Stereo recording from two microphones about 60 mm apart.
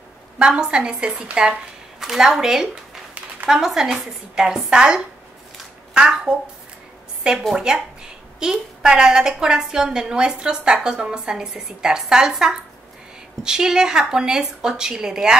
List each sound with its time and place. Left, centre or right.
0.4 s a woman's voice: centre
7.5 s a woman's voice: centre